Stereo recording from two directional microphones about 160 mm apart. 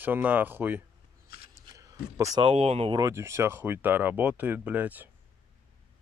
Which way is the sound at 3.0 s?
15° right (ahead or behind).